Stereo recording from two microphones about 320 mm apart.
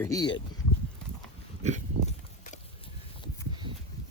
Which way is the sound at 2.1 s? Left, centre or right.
Left.